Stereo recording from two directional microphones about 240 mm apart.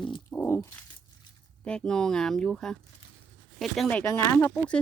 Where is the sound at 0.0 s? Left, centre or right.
Centre.